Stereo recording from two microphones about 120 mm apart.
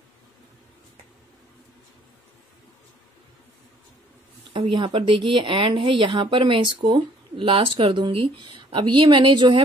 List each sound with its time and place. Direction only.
4.5 s speech: 45° right (ahead or behind)